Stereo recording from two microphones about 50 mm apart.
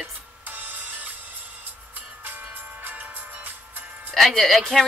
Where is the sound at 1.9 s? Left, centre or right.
Right.